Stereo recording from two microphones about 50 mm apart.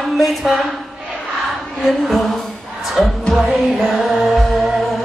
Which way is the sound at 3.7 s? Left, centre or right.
Centre.